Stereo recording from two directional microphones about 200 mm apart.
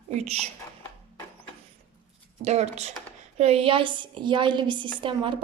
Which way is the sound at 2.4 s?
35° right (ahead or behind).